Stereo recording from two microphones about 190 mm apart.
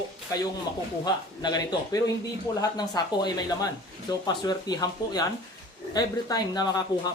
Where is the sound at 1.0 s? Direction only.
20° left (ahead or behind).